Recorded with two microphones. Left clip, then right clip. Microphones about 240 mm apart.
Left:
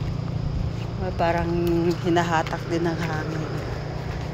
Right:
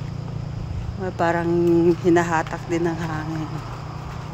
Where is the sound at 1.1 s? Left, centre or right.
Right.